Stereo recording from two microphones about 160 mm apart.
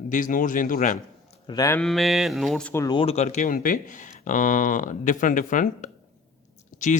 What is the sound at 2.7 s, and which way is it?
Speech, 20° left (ahead or behind).